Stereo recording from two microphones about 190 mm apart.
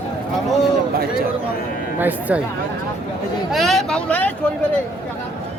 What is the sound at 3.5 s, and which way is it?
Speech, centre (ahead or behind).